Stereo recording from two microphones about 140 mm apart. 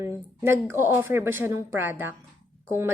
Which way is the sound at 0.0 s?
15° right (ahead or behind).